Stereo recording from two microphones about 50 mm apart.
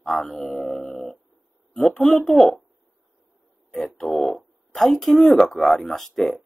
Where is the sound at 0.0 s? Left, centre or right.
Centre.